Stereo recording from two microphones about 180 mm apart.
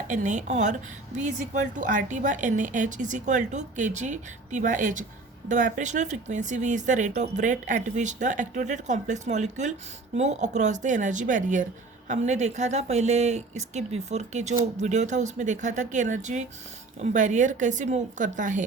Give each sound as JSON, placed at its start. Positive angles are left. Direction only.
{"t": 0.1, "sound": "a woman's voice", "side_deg": -45}